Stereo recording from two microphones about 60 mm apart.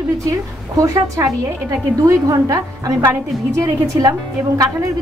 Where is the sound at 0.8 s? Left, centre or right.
Right.